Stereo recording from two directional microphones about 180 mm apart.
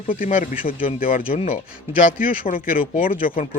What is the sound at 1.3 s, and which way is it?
Speech, 35° left (ahead or behind).